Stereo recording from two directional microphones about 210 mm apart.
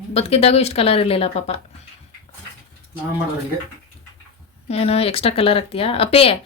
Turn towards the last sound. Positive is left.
turn(degrees=25)  # may be behind; listen again after turning